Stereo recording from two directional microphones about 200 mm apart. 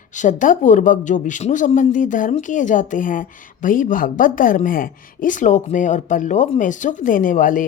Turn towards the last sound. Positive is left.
turn(degrees=40)  # may be behind; listen again after turning